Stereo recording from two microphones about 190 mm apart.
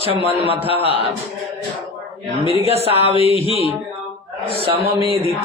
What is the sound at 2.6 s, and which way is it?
Speech, 30° right (ahead or behind).